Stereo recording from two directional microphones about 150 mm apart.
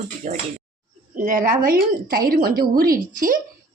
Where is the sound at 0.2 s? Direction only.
55° right (ahead or behind).